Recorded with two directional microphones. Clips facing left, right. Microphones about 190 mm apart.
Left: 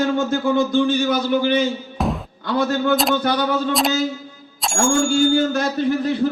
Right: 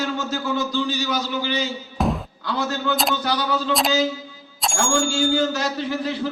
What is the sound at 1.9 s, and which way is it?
Music, centre (ahead or behind).